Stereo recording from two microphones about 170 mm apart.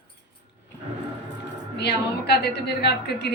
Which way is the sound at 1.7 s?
75° left (ahead or behind).